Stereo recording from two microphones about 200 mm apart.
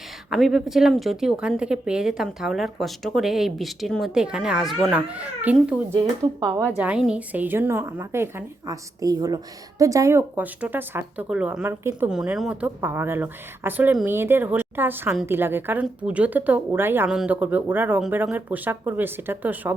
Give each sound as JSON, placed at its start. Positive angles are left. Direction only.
{"t": 0.3, "sound": "speech", "side_deg": 0}
{"t": 5.9, "sound": "speech", "side_deg": -20}
{"t": 6.7, "sound": "a woman's voice", "side_deg": -5}